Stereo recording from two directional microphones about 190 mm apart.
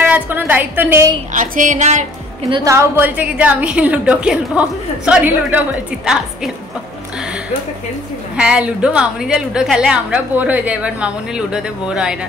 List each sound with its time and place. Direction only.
0.0 s music: 10° right (ahead or behind)
1.3 s music: 45° right (ahead or behind)
2.5 s a woman's voice: 15° right (ahead or behind)
7.2 s music: 5° right (ahead or behind)
8.4 s a woman's voice: 5° right (ahead or behind)